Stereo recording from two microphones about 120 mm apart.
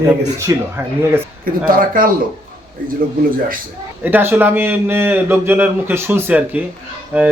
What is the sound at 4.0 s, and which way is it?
Speech, 15° right (ahead or behind).